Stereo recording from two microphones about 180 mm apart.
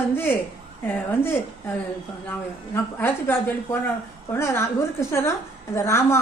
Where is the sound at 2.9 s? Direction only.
10° left (ahead or behind).